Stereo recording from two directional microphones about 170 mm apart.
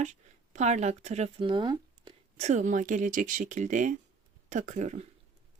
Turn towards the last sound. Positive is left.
turn(degrees=-45)  # may be behind; listen again after turning